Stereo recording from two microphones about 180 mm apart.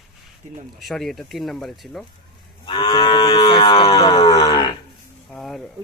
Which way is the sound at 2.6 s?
25° left (ahead or behind).